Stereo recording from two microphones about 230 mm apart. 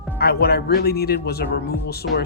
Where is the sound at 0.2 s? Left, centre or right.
Left.